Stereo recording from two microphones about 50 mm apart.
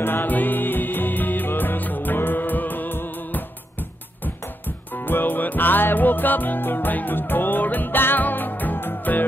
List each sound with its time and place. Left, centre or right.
0.0 s music: left
4.9 s music: left